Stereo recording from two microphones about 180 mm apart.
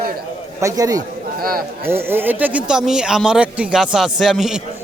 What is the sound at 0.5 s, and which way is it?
Speech, 20° right (ahead or behind).